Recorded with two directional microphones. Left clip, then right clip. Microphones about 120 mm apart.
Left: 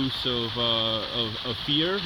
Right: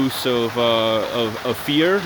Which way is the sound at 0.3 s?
35° right (ahead or behind).